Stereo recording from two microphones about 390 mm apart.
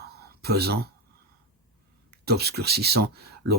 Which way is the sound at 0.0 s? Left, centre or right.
Right.